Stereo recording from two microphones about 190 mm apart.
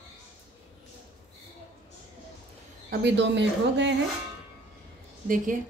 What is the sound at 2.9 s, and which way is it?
Speech, 65° right (ahead or behind).